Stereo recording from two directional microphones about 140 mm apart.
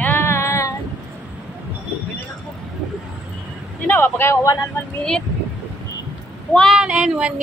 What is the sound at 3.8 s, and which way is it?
Speech, 15° left (ahead or behind).